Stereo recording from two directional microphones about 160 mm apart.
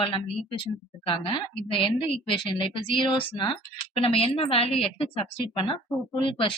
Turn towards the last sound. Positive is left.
turn(degrees=35)  # may be behind; listen again after turning